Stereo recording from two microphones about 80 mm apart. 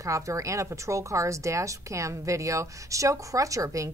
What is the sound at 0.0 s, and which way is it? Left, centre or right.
A woman's voice, right.